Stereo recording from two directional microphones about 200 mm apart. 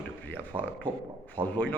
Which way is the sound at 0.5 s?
25° right (ahead or behind).